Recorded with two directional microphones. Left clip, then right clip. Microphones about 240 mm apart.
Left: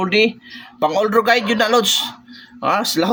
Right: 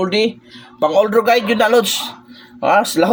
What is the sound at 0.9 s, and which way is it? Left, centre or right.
Speech, centre.